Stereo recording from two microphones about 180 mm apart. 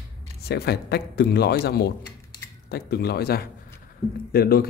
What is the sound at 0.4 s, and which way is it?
Speech, 65° left (ahead or behind).